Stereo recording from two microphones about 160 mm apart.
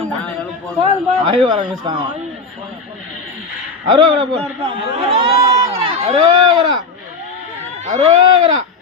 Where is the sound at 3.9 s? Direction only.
35° right (ahead or behind).